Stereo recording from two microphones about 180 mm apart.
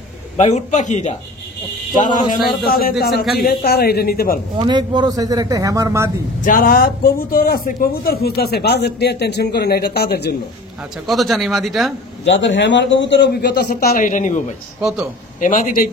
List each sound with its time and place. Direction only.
0.4 s a man's voice: 40° left (ahead or behind)
2.6 s a man's voice: 55° left (ahead or behind)
4.6 s speech: 25° right (ahead or behind)
6.4 s a man's voice: 55° left (ahead or behind)
11.1 s speech: centre (ahead or behind)
12.3 s a man's voice: 80° left; by 13.7 s 65° left (ahead or behind)
13.7 s speech: 45° left (ahead or behind)
14.8 s speech: centre (ahead or behind)
15.4 s speech: 45° left (ahead or behind)